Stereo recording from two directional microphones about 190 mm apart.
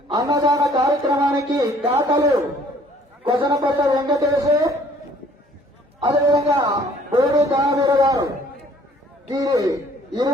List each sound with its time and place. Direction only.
0.1 s a man's voice: 20° right (ahead or behind)
6.2 s a man's voice: 20° right (ahead or behind)
9.3 s a man's voice: 20° right (ahead or behind)